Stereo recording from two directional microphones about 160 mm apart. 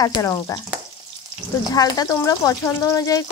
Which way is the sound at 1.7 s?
25° left (ahead or behind).